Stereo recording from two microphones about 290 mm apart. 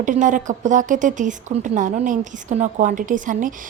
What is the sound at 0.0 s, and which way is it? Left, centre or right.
A woman's voice, right.